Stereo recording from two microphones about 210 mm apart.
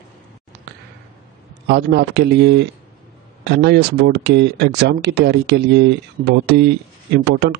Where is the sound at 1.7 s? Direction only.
50° right (ahead or behind).